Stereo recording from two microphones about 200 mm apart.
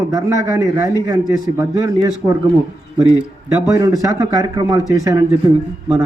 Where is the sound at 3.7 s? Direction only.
15° right (ahead or behind).